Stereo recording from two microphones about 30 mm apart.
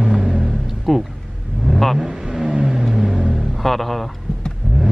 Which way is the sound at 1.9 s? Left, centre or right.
Centre.